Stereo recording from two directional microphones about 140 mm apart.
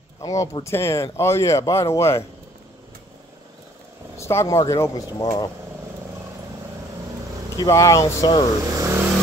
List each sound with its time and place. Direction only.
0.2 s speech: 25° left (ahead or behind)
4.2 s speech: 20° left (ahead or behind)
7.5 s speech: 25° left (ahead or behind)
8.7 s vehicle: 20° right (ahead or behind)